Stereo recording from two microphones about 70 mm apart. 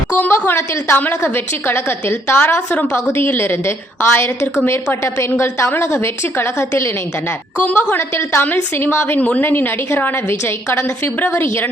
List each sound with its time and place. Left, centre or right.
0.2 s a woman's voice: left
7.6 s a woman's voice: left